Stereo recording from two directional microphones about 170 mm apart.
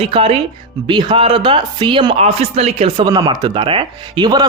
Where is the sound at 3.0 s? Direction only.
25° right (ahead or behind).